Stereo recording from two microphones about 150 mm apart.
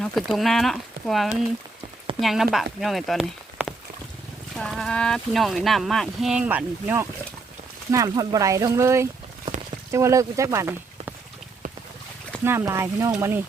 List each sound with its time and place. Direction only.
0.0 s speech: centre (ahead or behind)
3.6 s a sound: 10° right (ahead or behind)
4.5 s speech: 5° left (ahead or behind); by 11.1 s 15° right (ahead or behind)
12.5 s speech: 20° right (ahead or behind)